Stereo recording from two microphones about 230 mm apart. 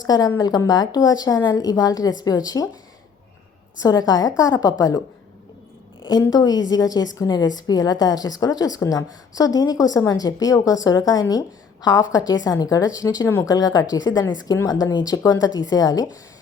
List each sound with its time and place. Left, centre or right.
0.0 s a woman's voice: centre
3.8 s a woman's voice: centre